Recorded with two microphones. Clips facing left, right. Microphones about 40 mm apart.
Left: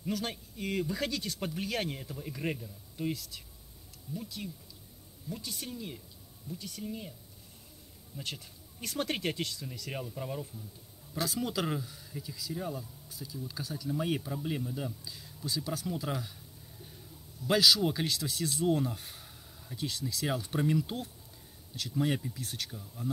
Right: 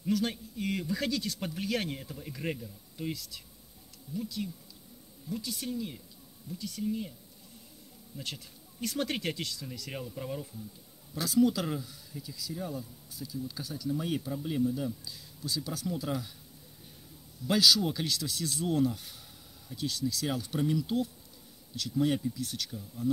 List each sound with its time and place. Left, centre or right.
0.3 s speech: centre
1.4 s speech: centre
4.4 s speech: centre
8.2 s speech: left
8.9 s speech: centre
9.3 s speech: left
9.8 s speech: centre
11.1 s speech: centre
17.5 s speech: centre
22.3 s speech: left